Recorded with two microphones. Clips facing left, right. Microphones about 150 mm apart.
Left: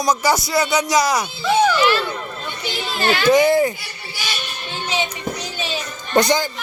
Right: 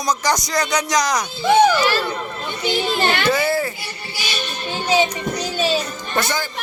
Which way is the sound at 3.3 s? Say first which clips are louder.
Left 6 dB; 15° left (ahead or behind).